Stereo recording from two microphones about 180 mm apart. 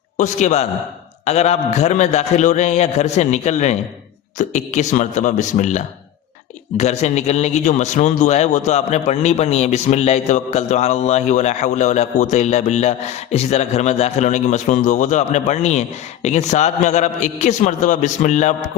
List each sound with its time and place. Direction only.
0.2 s a man's voice: 40° left (ahead or behind)